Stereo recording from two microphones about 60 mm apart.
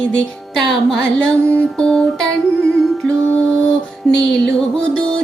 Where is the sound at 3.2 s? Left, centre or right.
Centre.